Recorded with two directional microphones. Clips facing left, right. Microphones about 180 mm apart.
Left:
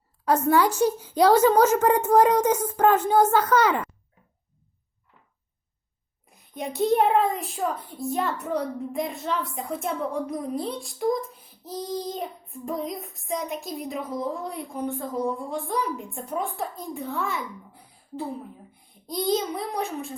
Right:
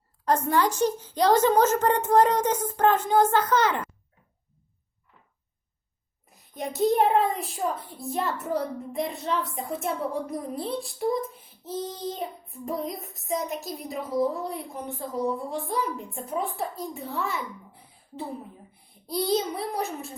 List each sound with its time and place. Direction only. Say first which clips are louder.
0.3 s a woman's voice: left 3 dB; 10° left (ahead or behind)
6.3 s child singing: left 1 dB; centre (ahead or behind)
19.0 s child singing: even; 5° right (ahead or behind)